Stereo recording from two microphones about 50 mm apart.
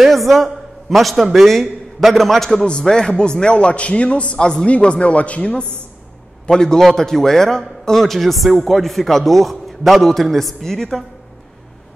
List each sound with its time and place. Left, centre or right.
0.0 s a man's voice: centre
2.6 s a man's voice: centre
6.5 s a man's voice: centre